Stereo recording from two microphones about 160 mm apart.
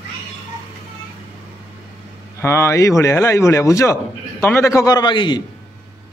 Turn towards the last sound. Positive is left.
turn(degrees=30)  # may be behind; listen again after turning